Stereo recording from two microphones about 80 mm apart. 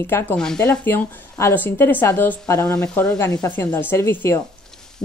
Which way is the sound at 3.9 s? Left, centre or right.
Left.